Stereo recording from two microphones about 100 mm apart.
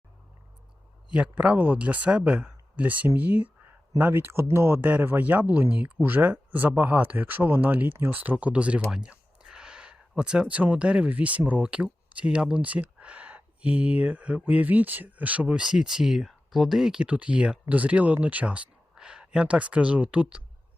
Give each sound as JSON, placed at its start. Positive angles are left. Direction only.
{"t": 1.1, "sound": "speech", "side_deg": -10}